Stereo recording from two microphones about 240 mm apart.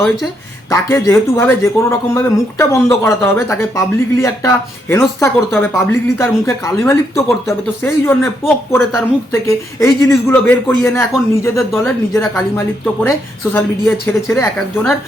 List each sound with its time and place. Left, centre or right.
0.7 s speech: centre